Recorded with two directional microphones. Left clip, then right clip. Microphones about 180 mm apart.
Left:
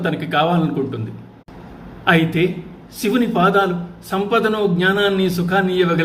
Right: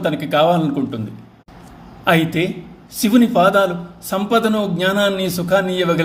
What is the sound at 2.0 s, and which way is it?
A man's voice, 45° right (ahead or behind).